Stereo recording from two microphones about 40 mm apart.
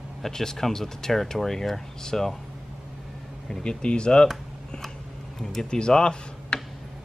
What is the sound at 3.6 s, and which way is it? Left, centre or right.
Speech, left.